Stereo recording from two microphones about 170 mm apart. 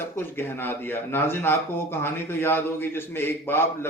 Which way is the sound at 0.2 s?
10° left (ahead or behind).